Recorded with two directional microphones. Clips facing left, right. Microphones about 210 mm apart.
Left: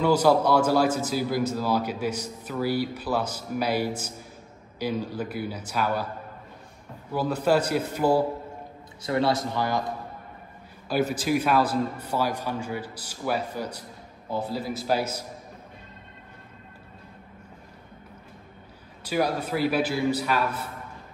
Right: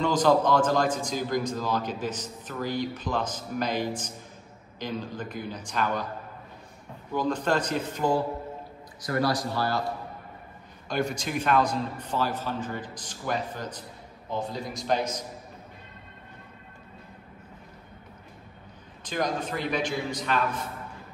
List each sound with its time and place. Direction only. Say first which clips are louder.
0.0 s a man's voice: left 2 dB; 10° left (ahead or behind)
7.1 s a man's voice: left 3 dB; 5° left (ahead or behind)
9.0 s a man's voice: left 2 dB; 25° left (ahead or behind)
10.9 s a man's voice: left 5 dB; 5° left (ahead or behind)
19.0 s a man's voice: left 3 dB; 10° left (ahead or behind)